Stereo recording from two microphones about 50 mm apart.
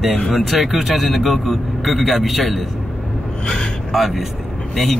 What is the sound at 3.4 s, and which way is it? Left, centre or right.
Speech, left.